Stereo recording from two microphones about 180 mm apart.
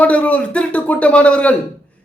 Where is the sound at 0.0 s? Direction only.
5° left (ahead or behind).